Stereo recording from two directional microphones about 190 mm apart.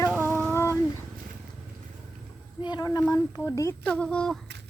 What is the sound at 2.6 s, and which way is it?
Speech, 20° left (ahead or behind).